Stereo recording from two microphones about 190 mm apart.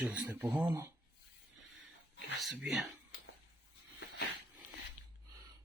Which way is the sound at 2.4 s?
Centre (ahead or behind).